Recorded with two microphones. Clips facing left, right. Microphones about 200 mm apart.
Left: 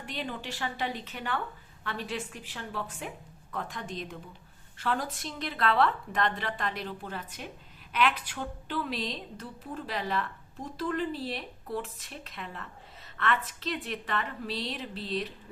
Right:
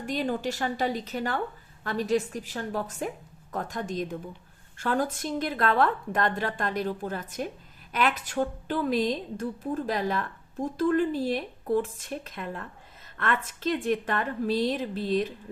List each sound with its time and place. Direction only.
0.0 s a woman's voice: 45° right (ahead or behind)